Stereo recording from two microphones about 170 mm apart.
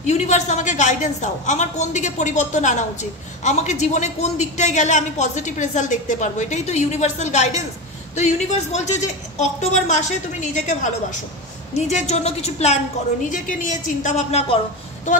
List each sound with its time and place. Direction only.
0.0 s a woman's voice: 45° left (ahead or behind)
13.3 s a woman's voice: 50° left (ahead or behind)